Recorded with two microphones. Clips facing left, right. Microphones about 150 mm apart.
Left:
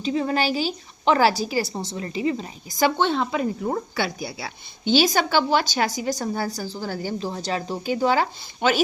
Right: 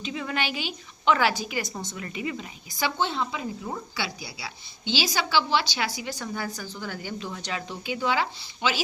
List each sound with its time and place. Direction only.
0.0 s a woman's voice: 35° left (ahead or behind)
3.0 s a woman's voice: 60° left (ahead or behind); by 8.8 s 45° left (ahead or behind)